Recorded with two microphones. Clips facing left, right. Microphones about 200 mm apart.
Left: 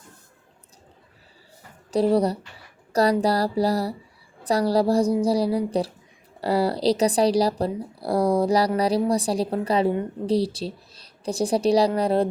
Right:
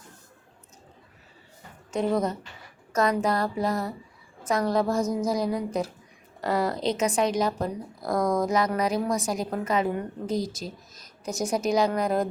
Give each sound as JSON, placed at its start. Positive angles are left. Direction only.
{"t": 1.9, "sound": "speech", "side_deg": 35}